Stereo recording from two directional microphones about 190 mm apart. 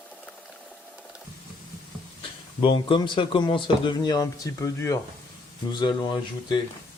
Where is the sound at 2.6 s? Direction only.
25° left (ahead or behind).